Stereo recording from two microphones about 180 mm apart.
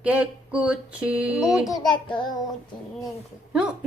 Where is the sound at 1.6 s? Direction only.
20° left (ahead or behind).